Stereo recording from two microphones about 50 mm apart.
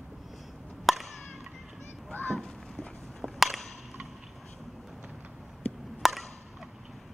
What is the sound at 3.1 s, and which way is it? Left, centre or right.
Chop, centre.